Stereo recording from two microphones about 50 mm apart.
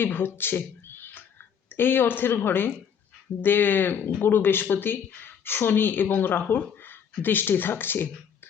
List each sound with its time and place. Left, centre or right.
0.0 s a woman's voice: left